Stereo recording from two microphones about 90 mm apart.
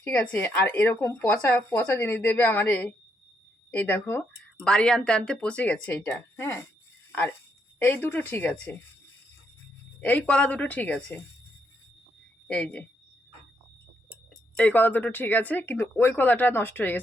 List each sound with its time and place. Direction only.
0.0 s speech: 15° left (ahead or behind)
4.6 s speech: 10° left (ahead or behind)
6.1 s speech: 25° left (ahead or behind)
7.8 s speech: 25° left (ahead or behind)
10.0 s speech: 15° left (ahead or behind)
12.5 s speech: 10° left (ahead or behind)
14.5 s speech: 15° left (ahead or behind)